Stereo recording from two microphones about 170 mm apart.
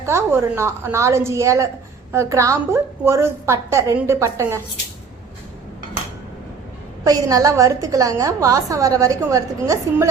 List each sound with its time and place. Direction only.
0.0 s a woman's voice: 15° right (ahead or behind)
7.0 s a woman's voice: 20° right (ahead or behind)